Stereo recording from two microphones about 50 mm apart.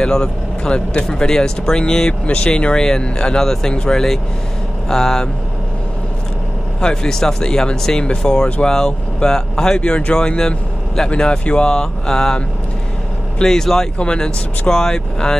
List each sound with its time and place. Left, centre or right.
0.0 s speech: centre
6.8 s speech: centre
13.4 s speech: centre